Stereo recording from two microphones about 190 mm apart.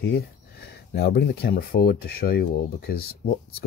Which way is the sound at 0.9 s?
55° left (ahead or behind).